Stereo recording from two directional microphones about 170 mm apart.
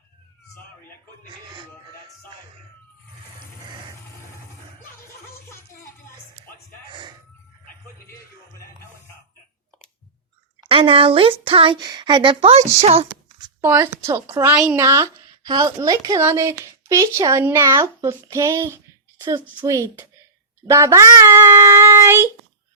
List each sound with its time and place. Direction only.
1.3 s speech: 30° right (ahead or behind)
6.9 s a sound: 30° right (ahead or behind)
10.7 s speech: 30° right (ahead or behind)
13.6 s a child's voice: 15° right (ahead or behind)